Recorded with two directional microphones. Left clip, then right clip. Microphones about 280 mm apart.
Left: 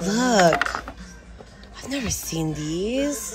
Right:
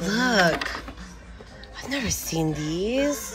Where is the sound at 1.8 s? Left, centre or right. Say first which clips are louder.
Even; centre.